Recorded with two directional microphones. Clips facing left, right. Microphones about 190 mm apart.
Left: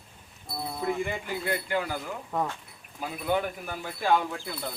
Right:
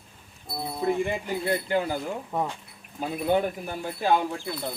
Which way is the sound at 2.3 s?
15° right (ahead or behind).